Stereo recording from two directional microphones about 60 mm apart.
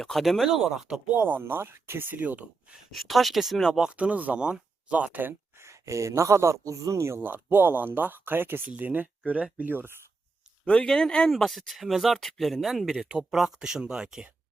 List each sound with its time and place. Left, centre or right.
0.0 s speech: centre
1.1 s speech: right
1.4 s speech: right
2.7 s speech: centre
3.9 s speech: right
5.5 s speech: right
7.2 s speech: right
10.7 s speech: centre